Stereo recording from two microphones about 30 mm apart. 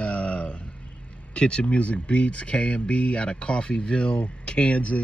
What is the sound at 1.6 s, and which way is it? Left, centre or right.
Speech, left.